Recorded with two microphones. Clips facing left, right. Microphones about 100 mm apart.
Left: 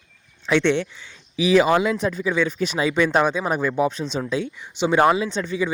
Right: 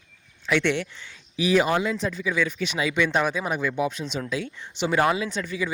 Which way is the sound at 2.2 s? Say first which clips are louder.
Left 3 dB; 30° left (ahead or behind).